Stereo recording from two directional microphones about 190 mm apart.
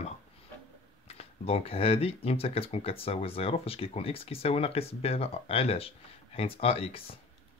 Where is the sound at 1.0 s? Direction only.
30° left (ahead or behind).